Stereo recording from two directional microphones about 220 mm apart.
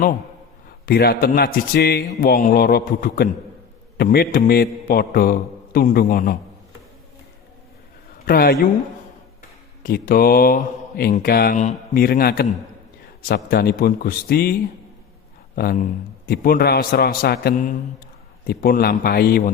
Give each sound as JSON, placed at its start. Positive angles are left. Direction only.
{"t": 0.9, "sound": "a man's voice", "side_deg": 45}
{"t": 8.2, "sound": "speech", "side_deg": 45}
{"t": 9.8, "sound": "a man's voice", "side_deg": 40}
{"t": 15.5, "sound": "a man's voice", "side_deg": 40}